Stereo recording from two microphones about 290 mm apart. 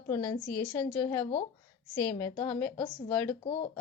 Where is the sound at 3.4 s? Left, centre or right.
Centre.